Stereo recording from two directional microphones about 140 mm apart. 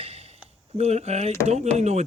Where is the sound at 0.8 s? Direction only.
50° right (ahead or behind).